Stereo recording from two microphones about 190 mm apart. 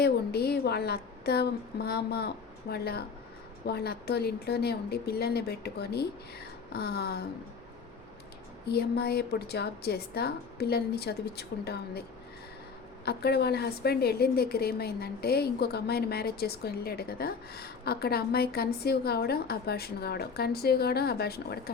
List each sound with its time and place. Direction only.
0.0 s a woman's voice: 55° left (ahead or behind)
8.6 s a woman's voice: 55° left (ahead or behind)
13.1 s a woman's voice: 60° left (ahead or behind)